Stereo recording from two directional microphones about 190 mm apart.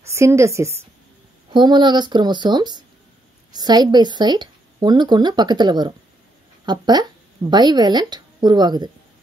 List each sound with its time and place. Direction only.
0.1 s a woman's voice: 15° right (ahead or behind)